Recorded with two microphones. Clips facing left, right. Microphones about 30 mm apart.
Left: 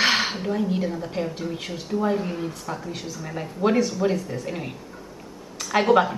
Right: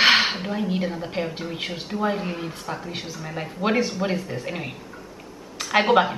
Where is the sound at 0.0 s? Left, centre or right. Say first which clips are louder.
Right 4 dB; right.